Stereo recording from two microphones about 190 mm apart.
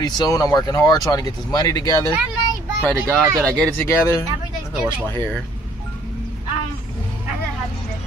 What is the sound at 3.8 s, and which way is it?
Speech, 15° left (ahead or behind).